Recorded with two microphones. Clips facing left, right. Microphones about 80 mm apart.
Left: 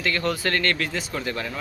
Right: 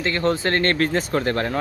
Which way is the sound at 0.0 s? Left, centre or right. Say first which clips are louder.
Right 4 dB; right.